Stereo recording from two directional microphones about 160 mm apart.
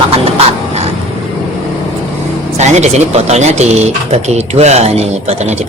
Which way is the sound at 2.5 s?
45° right (ahead or behind).